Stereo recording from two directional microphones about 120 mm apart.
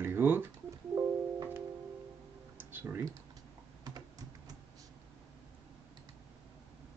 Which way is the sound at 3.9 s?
30° right (ahead or behind).